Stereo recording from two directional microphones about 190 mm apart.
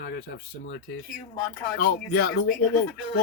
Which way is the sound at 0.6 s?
70° left (ahead or behind).